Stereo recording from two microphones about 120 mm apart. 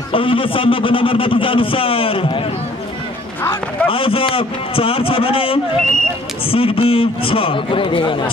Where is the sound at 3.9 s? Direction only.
50° left (ahead or behind).